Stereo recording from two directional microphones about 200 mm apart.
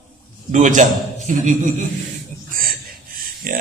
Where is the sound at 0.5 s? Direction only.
40° right (ahead or behind).